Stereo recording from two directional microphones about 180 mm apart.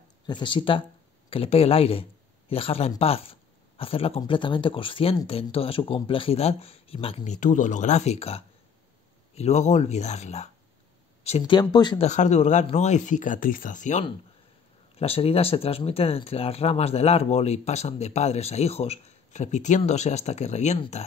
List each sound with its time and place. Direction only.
0.3 s speech: 25° left (ahead or behind)
7.3 s speech: 45° left (ahead or behind)
11.7 s speech: 25° left (ahead or behind)
12.1 s speech: 40° left (ahead or behind)